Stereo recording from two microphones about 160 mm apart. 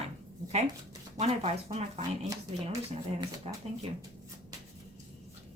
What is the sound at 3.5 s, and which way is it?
Speech, 40° right (ahead or behind).